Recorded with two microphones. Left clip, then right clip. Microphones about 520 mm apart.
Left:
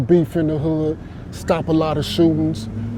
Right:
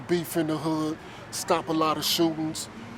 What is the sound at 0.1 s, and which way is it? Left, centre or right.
Speech, left.